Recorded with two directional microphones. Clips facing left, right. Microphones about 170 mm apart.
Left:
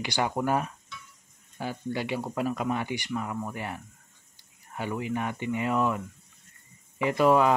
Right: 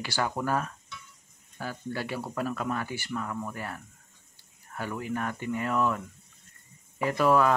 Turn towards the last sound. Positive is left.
turn(degrees=15)  # may be behind; listen again after turning